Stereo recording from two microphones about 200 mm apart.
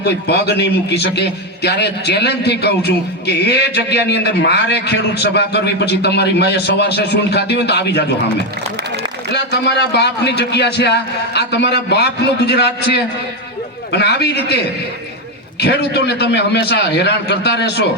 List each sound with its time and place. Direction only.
0.0 s a man's voice: 55° left (ahead or behind)
9.3 s a man's voice: 55° left (ahead or behind)
15.6 s a man's voice: 55° left (ahead or behind)